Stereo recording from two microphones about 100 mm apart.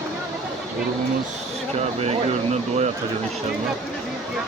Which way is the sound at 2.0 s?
90° right.